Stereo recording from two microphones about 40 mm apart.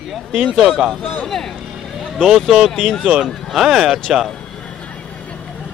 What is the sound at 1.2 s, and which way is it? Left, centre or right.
Speech, centre.